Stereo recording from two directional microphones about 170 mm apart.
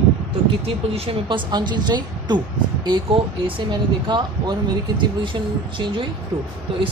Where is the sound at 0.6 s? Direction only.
35° right (ahead or behind).